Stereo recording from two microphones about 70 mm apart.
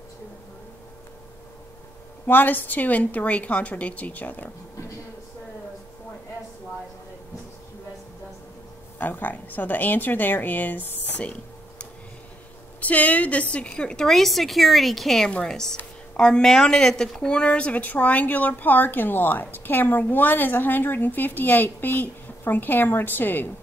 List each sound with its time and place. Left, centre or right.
2.2 s a woman's voice: left
8.9 s a woman's voice: left
12.8 s a woman's voice: centre